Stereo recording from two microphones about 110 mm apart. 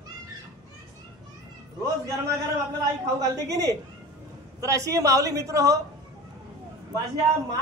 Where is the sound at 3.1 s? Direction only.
30° right (ahead or behind).